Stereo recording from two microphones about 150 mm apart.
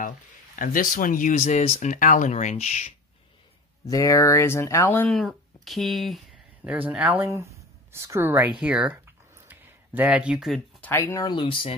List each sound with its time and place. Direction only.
0.6 s speech: 65° left (ahead or behind); by 2.9 s 45° left (ahead or behind)
3.8 s speech: 20° left (ahead or behind)
5.1 s speech: centre (ahead or behind)
7.2 s a sound: 20° right (ahead or behind)
10.8 s speech: 15° left (ahead or behind)
11.2 s speech: 35° left (ahead or behind)